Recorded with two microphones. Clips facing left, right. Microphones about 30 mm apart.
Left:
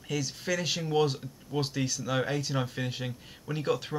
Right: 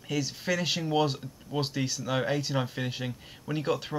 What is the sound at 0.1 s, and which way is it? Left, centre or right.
Speech, centre.